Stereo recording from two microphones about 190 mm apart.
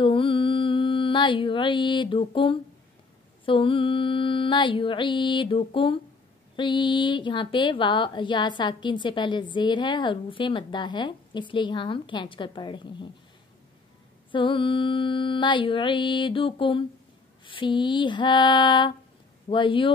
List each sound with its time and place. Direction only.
0.0 s mantra: 25° left (ahead or behind)
3.4 s a woman's voice: 25° left (ahead or behind)
14.3 s a woman's voice: 25° left (ahead or behind)